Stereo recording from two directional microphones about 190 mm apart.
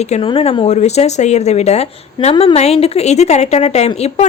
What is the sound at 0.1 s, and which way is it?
A woman's voice, 30° left (ahead or behind).